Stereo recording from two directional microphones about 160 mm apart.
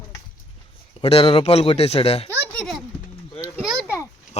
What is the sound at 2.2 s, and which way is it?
Speech, 5° left (ahead or behind).